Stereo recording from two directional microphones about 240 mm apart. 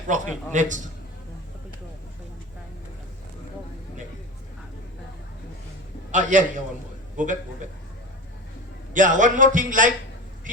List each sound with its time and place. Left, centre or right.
0.1 s a man's voice: right
6.1 s a man's voice: right
8.9 s a man's voice: right